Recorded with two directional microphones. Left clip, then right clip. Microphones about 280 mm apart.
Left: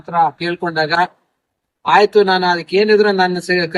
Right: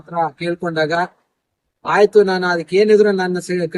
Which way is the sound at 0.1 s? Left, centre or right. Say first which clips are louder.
Left 5 dB; centre.